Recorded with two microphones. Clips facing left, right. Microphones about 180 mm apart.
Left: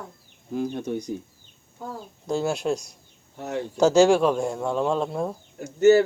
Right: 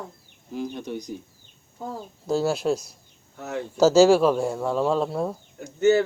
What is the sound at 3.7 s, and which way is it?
Speech, 5° right (ahead or behind).